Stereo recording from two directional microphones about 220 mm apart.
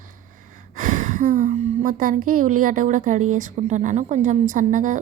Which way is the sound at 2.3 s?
35° right (ahead or behind).